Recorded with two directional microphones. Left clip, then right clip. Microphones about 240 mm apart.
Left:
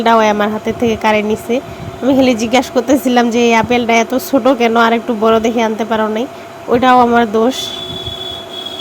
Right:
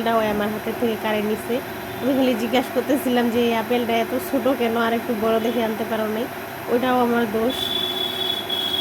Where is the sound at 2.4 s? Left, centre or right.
Left.